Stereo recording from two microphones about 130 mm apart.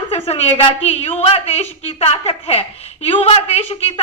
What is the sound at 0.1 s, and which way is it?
A woman's voice, 50° left (ahead or behind).